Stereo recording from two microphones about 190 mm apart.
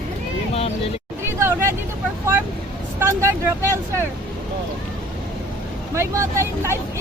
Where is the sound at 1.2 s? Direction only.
15° right (ahead or behind).